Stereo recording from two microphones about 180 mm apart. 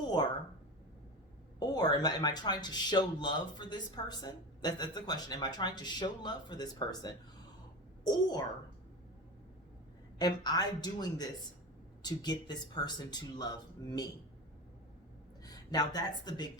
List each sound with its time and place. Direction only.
1.5 s speech: 20° left (ahead or behind)
10.2 s speech: 20° left (ahead or behind)
15.4 s speech: 20° left (ahead or behind)